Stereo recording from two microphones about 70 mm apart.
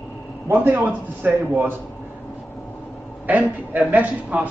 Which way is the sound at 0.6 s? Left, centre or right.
Right.